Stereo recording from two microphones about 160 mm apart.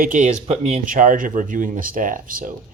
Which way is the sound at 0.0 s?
55° right (ahead or behind).